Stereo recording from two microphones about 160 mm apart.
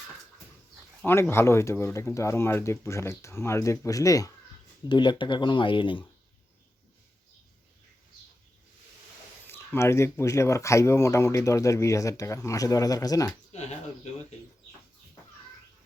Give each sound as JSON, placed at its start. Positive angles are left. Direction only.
{"t": 1.0, "sound": "speech", "side_deg": 15}
{"t": 9.5, "sound": "speech", "side_deg": 15}
{"t": 13.5, "sound": "speech", "side_deg": 45}